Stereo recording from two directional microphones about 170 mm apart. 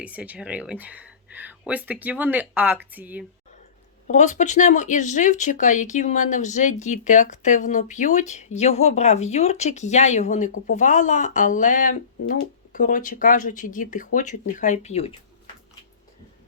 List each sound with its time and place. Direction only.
0.0 s speech: 10° right (ahead or behind)
4.0 s speech: 45° left (ahead or behind)